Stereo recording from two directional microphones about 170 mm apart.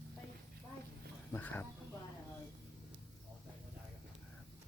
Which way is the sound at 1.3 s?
10° left (ahead or behind).